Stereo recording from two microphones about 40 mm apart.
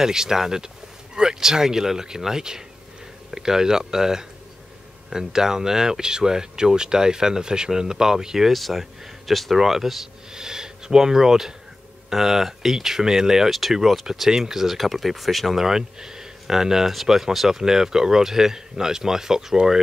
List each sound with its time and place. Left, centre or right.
0.0 s speech: centre
8.5 s speech: centre
9.6 s speech: centre
13.5 s speech: centre
15.6 s speech: centre